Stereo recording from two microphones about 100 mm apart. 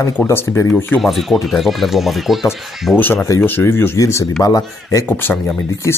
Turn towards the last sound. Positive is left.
turn(degrees=20)  # may be behind; listen again after turning